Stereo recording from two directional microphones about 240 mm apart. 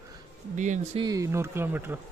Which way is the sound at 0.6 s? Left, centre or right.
Right.